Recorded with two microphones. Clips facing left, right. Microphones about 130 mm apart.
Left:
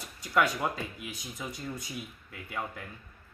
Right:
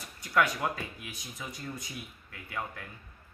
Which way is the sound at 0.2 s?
25° left (ahead or behind).